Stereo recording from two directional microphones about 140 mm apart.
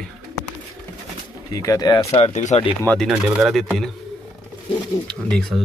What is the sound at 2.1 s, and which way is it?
Speech, 50° left (ahead or behind).